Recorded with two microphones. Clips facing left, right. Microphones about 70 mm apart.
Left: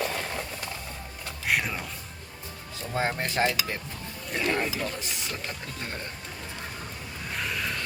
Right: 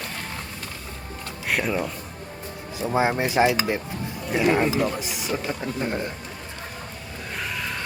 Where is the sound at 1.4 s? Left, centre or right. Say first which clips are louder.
Right 3 dB; centre.